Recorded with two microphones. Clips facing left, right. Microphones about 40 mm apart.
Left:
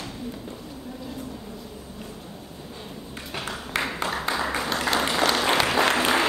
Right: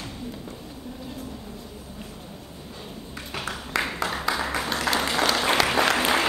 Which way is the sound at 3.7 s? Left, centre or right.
Left.